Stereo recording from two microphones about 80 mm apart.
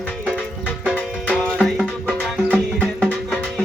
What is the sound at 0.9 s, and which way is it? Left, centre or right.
Music, centre.